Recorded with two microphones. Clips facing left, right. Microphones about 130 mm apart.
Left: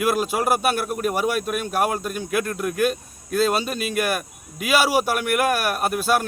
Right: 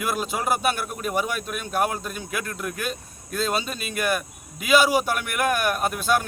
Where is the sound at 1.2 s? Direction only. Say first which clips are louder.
Left 6 dB; 50° left (ahead or behind).